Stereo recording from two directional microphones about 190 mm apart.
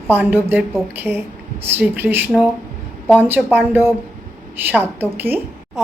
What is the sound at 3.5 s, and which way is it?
A woman's voice, 10° right (ahead or behind).